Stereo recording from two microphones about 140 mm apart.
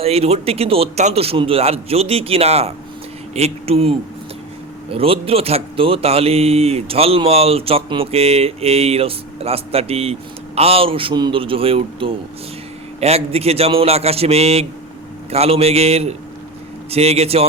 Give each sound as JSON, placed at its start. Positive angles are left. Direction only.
{"t": 0.0, "sound": "speech", "side_deg": -45}